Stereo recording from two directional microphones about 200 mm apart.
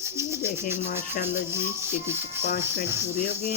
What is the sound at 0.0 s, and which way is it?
Rub, 15° right (ahead or behind).